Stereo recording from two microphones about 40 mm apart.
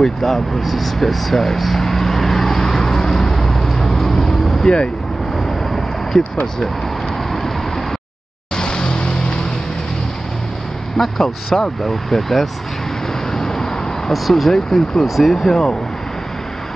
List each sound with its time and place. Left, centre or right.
0.0 s vehicle: centre
7.3 s vehicle: centre
8.5 s vehicle: left
11.0 s speech: centre
13.3 s vehicle: centre
14.3 s speech: centre
15.4 s speech: centre